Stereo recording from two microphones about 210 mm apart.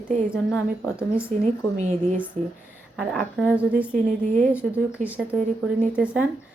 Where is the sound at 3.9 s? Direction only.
5° left (ahead or behind).